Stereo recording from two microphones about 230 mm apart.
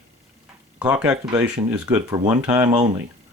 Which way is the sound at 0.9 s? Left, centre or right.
Centre.